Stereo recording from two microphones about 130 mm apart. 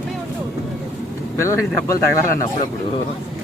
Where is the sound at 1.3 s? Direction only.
20° left (ahead or behind).